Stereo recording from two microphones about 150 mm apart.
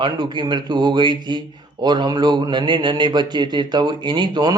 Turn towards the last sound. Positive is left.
turn(degrees=-30)  # may be behind; listen again after turning